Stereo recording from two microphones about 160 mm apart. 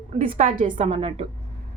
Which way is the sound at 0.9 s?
35° right (ahead or behind).